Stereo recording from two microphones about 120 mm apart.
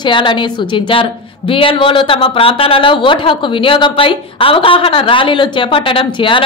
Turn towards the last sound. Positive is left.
turn(degrees=45)  # may be behind; listen again after turning